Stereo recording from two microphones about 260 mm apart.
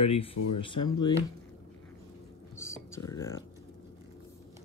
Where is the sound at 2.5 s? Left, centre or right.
Centre.